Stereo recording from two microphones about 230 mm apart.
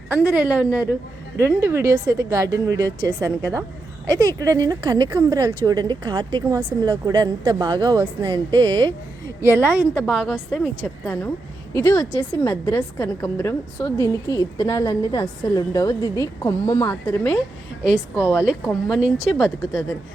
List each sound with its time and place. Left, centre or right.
0.1 s a woman's voice: centre
11.8 s a woman's voice: centre
17.9 s speech: centre